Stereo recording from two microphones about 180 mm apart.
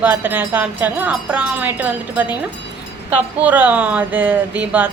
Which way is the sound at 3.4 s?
10° right (ahead or behind).